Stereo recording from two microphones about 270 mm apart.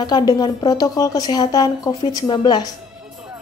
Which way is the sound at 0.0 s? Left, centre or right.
Centre.